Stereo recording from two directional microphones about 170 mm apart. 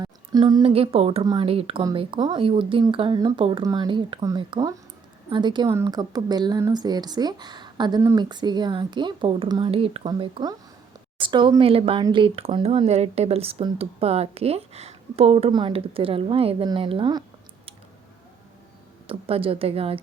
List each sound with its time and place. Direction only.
0.0 s speech: 25° right (ahead or behind)
19.0 s speech: 35° right (ahead or behind)